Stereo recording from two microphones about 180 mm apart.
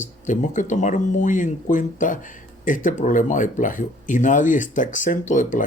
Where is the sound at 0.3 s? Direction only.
45° left (ahead or behind).